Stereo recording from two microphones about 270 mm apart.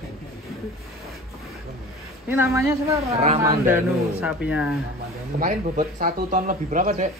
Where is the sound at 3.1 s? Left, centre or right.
Right.